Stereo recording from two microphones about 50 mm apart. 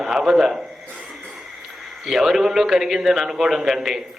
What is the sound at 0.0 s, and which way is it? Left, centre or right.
Speech, centre.